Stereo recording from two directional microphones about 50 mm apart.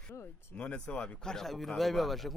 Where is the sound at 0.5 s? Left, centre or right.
Left; by 2.3 s centre.